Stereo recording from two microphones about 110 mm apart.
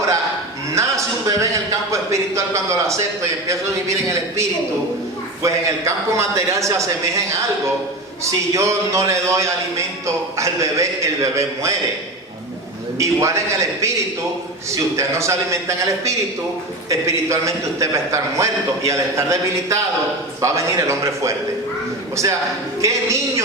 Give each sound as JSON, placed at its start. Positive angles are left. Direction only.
{"t": 0.8, "sound": "a man's voice", "side_deg": -30}
{"t": 8.2, "sound": "a man's voice", "side_deg": -25}
{"t": 13.0, "sound": "a man's voice", "side_deg": -30}